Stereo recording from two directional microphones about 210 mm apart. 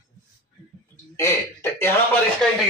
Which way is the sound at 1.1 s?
15° left (ahead or behind).